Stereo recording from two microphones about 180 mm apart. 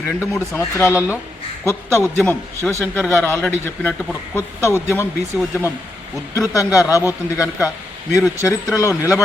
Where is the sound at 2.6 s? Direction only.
15° right (ahead or behind).